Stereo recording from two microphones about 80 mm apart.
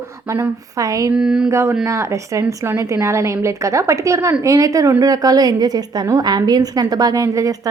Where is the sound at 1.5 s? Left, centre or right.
Right.